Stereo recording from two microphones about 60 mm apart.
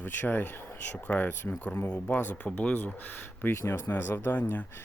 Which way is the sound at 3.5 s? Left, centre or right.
Left.